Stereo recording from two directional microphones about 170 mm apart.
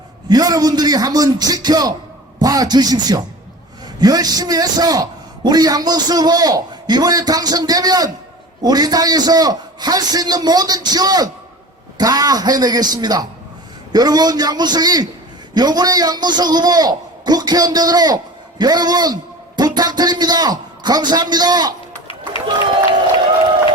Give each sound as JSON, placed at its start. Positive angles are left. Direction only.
{"t": 0.3, "sound": "a man's voice", "side_deg": -20}